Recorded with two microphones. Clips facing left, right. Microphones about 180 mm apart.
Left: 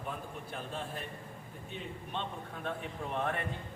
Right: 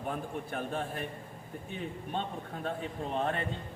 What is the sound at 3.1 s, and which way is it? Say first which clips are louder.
Speech: right 2 dB; 30° right (ahead or behind).